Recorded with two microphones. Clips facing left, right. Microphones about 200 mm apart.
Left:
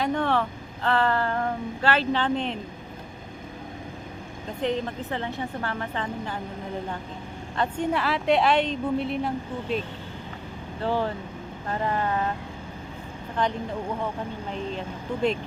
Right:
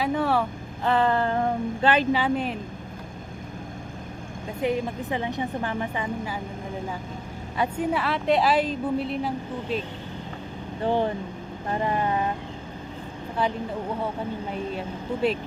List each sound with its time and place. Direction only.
0.0 s a woman's voice: 5° right (ahead or behind)
4.6 s a woman's voice: 10° right (ahead or behind)
7.5 s speech: 10° right (ahead or behind)
10.8 s a woman's voice: 20° right (ahead or behind)
13.4 s a woman's voice: 5° right (ahead or behind)